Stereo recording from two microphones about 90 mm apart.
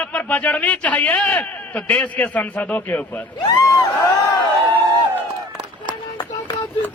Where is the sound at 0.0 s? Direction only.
15° left (ahead or behind).